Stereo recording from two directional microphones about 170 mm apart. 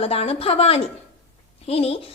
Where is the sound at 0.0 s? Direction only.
35° left (ahead or behind).